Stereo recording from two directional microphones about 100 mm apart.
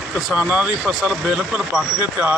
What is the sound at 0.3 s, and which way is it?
Speech, 15° right (ahead or behind).